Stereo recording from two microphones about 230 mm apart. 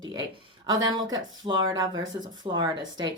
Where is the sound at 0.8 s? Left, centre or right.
Centre.